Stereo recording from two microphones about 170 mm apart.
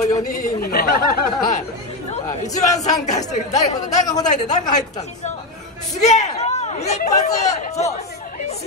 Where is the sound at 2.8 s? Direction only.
45° left (ahead or behind).